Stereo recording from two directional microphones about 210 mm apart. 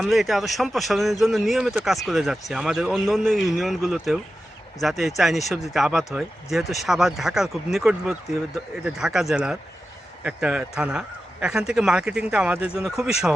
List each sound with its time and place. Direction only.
0.0 s a man's voice: centre (ahead or behind)